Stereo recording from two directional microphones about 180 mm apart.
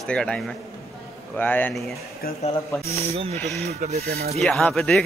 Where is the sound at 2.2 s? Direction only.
55° left (ahead or behind).